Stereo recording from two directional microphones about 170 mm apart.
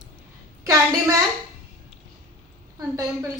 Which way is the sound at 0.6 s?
20° right (ahead or behind).